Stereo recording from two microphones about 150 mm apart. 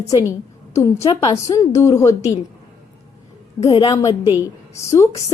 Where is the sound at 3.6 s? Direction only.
30° left (ahead or behind).